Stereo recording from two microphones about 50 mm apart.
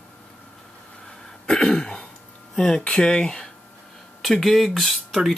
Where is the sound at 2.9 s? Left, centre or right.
Centre.